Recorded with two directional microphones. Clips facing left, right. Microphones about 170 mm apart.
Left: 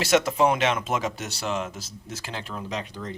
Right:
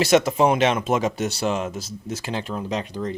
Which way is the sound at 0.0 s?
15° right (ahead or behind).